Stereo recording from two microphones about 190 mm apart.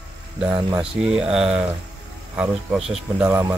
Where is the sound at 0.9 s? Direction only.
5° right (ahead or behind).